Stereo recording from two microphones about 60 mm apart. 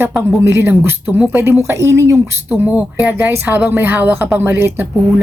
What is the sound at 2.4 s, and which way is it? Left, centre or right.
A woman's voice, right.